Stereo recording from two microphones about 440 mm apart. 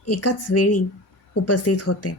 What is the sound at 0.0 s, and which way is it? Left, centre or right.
Speech, left.